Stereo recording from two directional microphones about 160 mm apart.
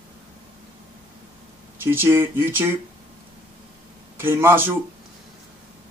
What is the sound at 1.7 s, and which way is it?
Speech, 15° right (ahead or behind).